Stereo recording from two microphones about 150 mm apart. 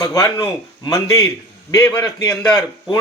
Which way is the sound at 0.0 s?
20° left (ahead or behind).